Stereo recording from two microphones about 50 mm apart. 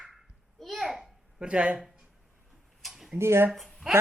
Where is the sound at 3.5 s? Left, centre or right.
Centre.